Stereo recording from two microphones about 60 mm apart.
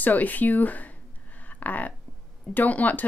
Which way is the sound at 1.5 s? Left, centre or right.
Left.